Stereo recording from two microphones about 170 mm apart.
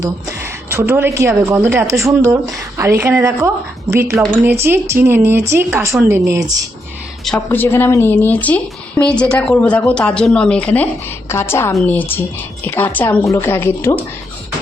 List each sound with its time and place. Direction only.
0.0 s a woman's voice: 15° right (ahead or behind)
7.3 s a woman's voice: 10° left (ahead or behind)